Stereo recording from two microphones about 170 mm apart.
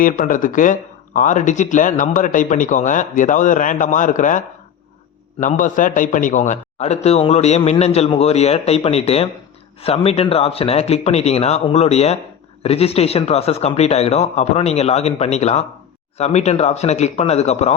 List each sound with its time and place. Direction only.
0.0 s a man's voice: 50° left (ahead or behind)